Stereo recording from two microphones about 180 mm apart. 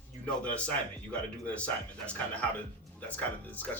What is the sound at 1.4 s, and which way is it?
Speech, 5° left (ahead or behind).